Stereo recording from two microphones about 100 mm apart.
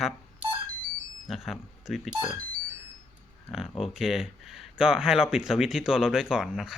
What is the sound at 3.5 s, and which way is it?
Speech, 5° right (ahead or behind).